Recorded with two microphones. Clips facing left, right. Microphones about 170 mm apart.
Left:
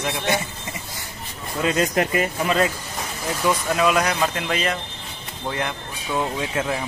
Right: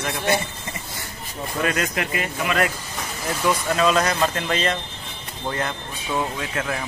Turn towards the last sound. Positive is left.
turn(degrees=20)  # may be behind; listen again after turning